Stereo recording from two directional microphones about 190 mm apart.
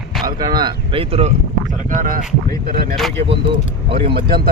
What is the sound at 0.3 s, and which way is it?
Speech, 20° right (ahead or behind).